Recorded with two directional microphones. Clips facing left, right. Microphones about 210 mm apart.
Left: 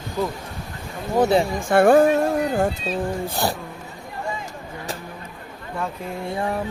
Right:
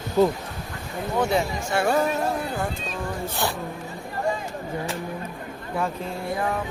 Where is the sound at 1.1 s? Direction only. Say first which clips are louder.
Left 5 dB; 35° left (ahead or behind).